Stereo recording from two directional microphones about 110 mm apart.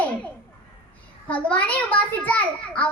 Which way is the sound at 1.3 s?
15° left (ahead or behind).